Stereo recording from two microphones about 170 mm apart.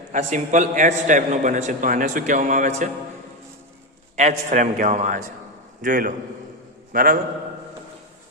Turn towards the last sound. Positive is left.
turn(degrees=-55)  # may be behind; listen again after turning